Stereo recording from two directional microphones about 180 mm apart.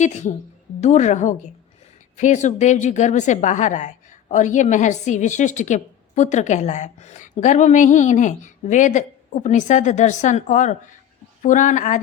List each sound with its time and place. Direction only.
0.0 s a woman's voice: 40° left (ahead or behind)